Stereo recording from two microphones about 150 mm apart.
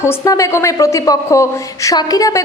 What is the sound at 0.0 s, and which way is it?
A man's voice, 20° left (ahead or behind).